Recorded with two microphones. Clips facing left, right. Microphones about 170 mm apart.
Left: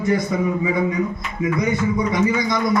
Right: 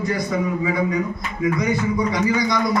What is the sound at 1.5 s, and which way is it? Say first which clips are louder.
Speech: left 3 dB; 25° left (ahead or behind).